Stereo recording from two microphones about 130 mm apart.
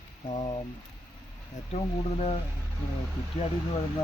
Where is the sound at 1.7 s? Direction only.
55° left (ahead or behind).